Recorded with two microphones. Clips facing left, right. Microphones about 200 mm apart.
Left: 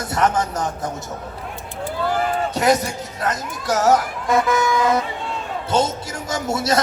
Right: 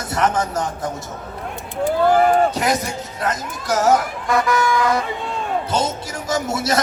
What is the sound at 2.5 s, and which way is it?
Speech, 25° left (ahead or behind).